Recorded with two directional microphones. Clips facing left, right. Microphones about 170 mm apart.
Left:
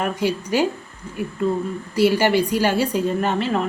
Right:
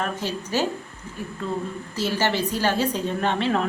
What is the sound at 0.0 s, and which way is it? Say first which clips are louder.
Speech: left 6 dB; 10° left (ahead or behind).